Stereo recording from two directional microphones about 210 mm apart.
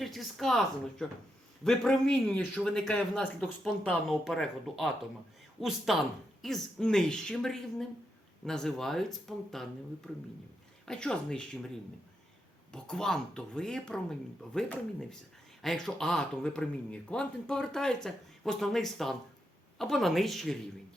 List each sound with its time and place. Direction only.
0.0 s speech: centre (ahead or behind)
10.8 s speech: 5° left (ahead or behind)
12.7 s speech: 5° left (ahead or behind)